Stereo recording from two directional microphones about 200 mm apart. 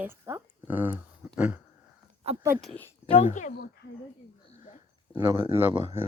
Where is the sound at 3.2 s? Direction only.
40° left (ahead or behind).